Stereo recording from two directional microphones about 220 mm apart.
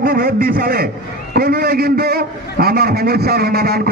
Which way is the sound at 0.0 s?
40° right (ahead or behind).